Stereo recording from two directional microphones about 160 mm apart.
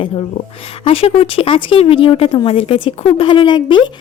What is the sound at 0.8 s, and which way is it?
A woman's voice, 35° left (ahead or behind).